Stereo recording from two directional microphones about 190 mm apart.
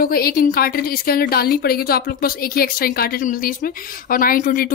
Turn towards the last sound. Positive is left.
turn(degrees=45)  # may be behind; listen again after turning